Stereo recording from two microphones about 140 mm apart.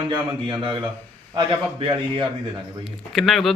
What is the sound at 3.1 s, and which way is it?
Speech, centre (ahead or behind).